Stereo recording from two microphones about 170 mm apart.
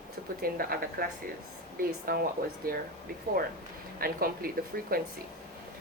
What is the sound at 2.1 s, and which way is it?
Speech, 60° right (ahead or behind).